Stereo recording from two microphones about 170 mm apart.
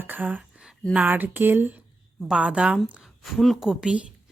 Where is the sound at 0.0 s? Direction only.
10° right (ahead or behind).